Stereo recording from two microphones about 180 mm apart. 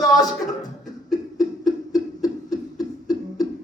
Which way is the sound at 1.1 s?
20° left (ahead or behind).